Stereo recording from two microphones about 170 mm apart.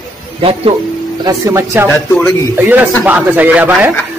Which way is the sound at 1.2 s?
15° right (ahead or behind).